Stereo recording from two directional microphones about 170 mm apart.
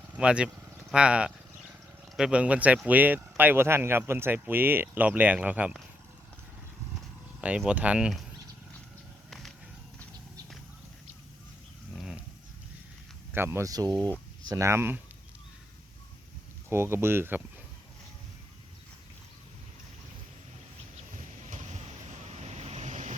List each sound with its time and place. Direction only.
0.1 s a sound: 5° right (ahead or behind)
2.1 s speech: 5° right (ahead or behind)
7.4 s speech: 5° right (ahead or behind)
11.9 s dog: centre (ahead or behind)
13.3 s speech: 15° right (ahead or behind)
16.6 s speech: 15° right (ahead or behind)
21.4 s vehicle: 45° right (ahead or behind)